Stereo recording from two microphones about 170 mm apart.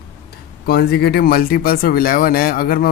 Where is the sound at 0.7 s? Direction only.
70° left (ahead or behind).